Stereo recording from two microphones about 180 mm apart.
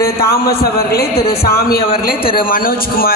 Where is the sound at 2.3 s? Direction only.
50° left (ahead or behind).